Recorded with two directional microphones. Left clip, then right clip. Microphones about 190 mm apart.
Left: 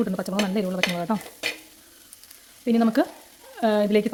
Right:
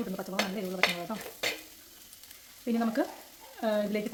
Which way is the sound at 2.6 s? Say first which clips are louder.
Left 9 dB; 50° left (ahead or behind).